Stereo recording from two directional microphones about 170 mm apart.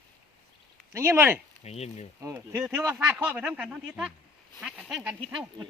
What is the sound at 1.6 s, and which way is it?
Speech, 40° left (ahead or behind).